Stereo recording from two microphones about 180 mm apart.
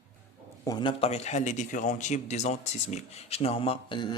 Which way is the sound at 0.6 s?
25° left (ahead or behind).